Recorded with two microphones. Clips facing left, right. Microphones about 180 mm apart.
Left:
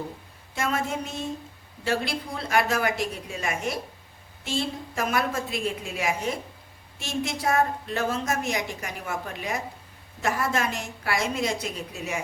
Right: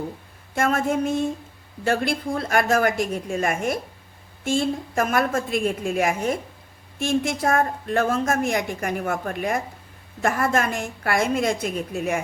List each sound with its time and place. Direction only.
0.5 s a woman's voice: 50° right (ahead or behind)